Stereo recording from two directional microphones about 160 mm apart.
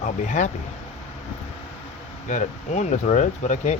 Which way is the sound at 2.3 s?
50° left (ahead or behind).